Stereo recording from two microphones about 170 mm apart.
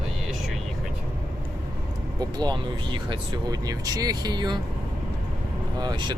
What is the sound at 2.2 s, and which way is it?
Speech, 25° right (ahead or behind).